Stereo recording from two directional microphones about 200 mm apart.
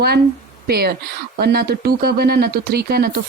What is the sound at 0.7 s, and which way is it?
Speech, 50° right (ahead or behind).